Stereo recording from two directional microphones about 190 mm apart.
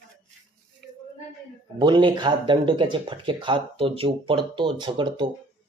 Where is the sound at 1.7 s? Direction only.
25° right (ahead or behind).